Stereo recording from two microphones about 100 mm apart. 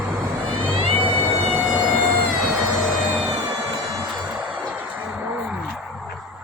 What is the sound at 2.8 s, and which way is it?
Music, 10° right (ahead or behind).